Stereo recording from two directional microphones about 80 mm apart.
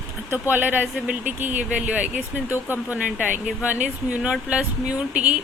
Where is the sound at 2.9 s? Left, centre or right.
Centre.